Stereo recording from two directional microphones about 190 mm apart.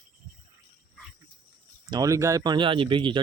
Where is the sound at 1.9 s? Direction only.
20° right (ahead or behind).